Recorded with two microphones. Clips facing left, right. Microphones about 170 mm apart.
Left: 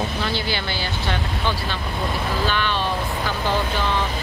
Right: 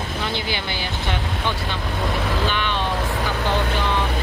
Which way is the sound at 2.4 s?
20° right (ahead or behind).